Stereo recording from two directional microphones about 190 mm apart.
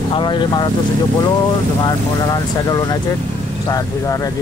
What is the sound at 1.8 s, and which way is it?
Speech, 20° left (ahead or behind).